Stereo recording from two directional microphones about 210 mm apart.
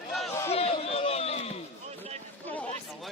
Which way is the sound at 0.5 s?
30° left (ahead or behind).